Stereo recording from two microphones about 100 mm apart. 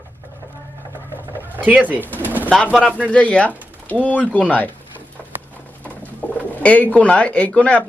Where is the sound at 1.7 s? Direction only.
15° right (ahead or behind).